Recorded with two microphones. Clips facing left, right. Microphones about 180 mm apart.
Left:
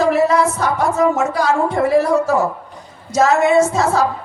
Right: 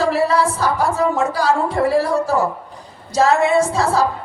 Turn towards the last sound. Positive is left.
turn(degrees=-30)  # may be behind; listen again after turning